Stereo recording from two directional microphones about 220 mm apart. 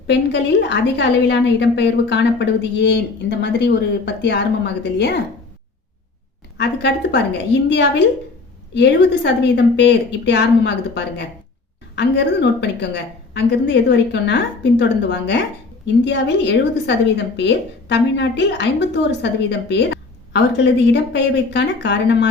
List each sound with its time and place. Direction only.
0.1 s a woman's voice: 50° left (ahead or behind)
6.6 s a woman's voice: 50° left (ahead or behind)